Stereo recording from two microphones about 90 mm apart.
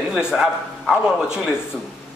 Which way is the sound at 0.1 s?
5° right (ahead or behind).